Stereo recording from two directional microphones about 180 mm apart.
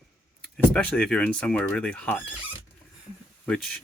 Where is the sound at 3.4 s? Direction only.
5° left (ahead or behind).